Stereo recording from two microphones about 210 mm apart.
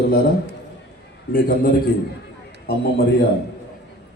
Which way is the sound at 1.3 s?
45° left (ahead or behind).